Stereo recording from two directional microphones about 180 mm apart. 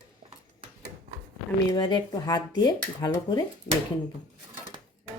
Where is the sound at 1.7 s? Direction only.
25° left (ahead or behind).